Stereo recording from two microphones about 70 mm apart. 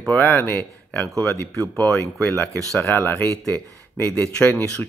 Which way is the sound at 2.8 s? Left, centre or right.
Left.